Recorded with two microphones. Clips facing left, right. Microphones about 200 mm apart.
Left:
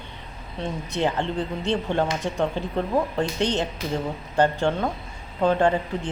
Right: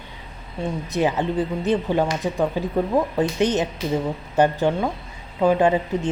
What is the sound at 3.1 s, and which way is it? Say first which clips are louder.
Speech: right 4 dB; 20° right (ahead or behind).